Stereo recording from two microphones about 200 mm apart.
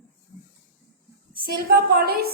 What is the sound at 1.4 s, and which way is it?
Speech, 50° right (ahead or behind).